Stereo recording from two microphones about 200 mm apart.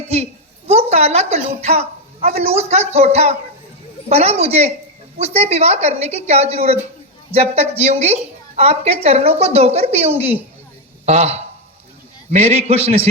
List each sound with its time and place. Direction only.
0.7 s a woman's voice: 30° right (ahead or behind)